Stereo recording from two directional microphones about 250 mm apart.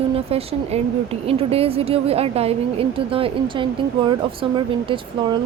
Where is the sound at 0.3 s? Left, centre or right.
Right.